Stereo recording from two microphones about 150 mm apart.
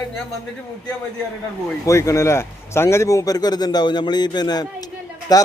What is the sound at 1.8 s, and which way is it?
A man's voice, 20° left (ahead or behind).